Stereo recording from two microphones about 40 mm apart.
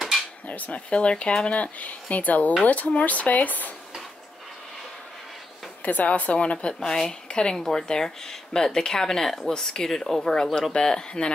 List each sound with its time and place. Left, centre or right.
0.5 s speech: left
5.8 s speech: left
6.7 s speech: centre
9.4 s speech: left
9.8 s speech: centre